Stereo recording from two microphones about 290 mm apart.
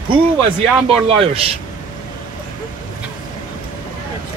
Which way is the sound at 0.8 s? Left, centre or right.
Centre.